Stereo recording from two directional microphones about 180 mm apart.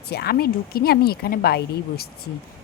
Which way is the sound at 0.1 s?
60° left (ahead or behind).